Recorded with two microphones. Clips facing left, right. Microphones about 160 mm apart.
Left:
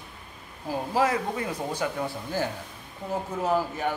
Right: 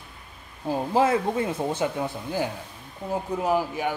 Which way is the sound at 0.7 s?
25° right (ahead or behind).